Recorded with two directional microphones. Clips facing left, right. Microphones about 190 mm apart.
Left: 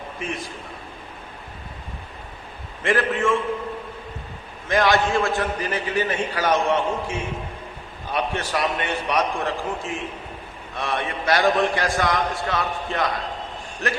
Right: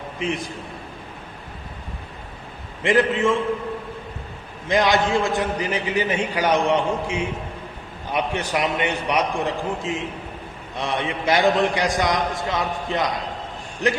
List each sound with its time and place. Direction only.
2.8 s a man's voice: 15° right (ahead or behind)
4.7 s a man's voice: 20° right (ahead or behind)